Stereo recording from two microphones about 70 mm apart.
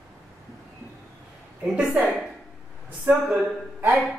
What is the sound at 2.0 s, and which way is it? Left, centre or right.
Speech, centre.